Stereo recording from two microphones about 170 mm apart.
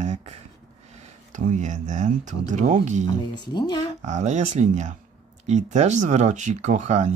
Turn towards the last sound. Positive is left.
turn(degrees=-45)  # may be behind; listen again after turning